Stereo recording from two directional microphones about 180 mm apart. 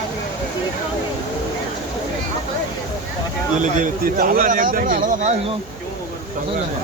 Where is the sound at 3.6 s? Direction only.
45° right (ahead or behind).